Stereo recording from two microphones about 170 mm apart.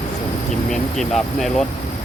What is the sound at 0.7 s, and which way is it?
Speech, centre (ahead or behind).